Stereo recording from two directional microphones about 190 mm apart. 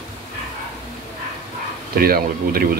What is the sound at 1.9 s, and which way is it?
Speech, 50° right (ahead or behind).